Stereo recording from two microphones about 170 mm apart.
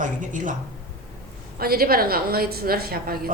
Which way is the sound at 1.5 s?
65° right (ahead or behind).